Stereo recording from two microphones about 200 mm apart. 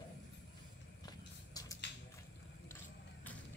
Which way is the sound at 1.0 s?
20° left (ahead or behind).